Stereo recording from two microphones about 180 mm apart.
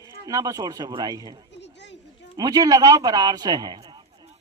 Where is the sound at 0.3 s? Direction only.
20° right (ahead or behind).